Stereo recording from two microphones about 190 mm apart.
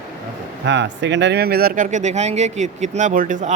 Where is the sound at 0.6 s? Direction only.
70° right (ahead or behind).